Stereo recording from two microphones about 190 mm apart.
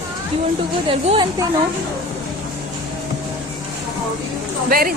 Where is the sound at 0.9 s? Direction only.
25° right (ahead or behind).